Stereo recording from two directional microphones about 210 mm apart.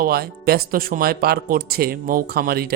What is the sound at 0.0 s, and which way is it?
Speech, 45° right (ahead or behind).